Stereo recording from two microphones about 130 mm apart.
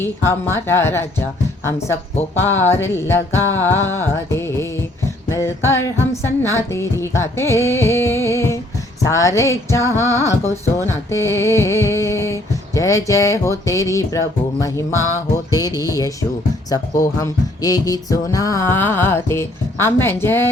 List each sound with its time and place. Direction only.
0.0 s speech: 20° left (ahead or behind)
2.4 s music: 15° left (ahead or behind)
6.4 s speech: 20° left (ahead or behind)
15.4 s speech: 30° left (ahead or behind)